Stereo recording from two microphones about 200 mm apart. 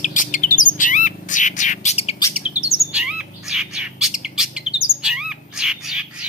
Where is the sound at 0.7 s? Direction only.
40° left (ahead or behind).